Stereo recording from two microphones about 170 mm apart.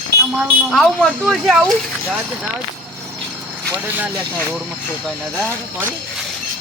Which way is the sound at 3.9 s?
5° right (ahead or behind).